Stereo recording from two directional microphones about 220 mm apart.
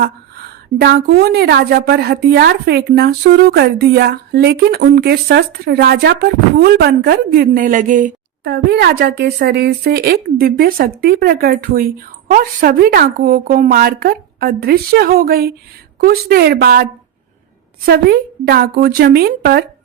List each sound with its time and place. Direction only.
0.8 s a woman's voice: 45° right (ahead or behind)
17.8 s a woman's voice: 45° right (ahead or behind)